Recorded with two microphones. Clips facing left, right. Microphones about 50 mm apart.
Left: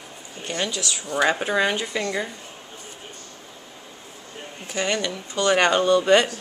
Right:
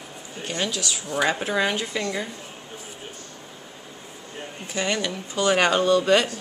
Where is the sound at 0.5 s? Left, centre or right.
Centre.